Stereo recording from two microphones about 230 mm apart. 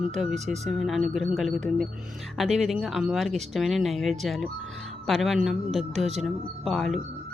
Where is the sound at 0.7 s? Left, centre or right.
Centre.